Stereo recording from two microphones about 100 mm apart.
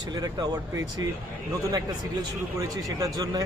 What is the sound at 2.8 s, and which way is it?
Speech, 35° right (ahead or behind).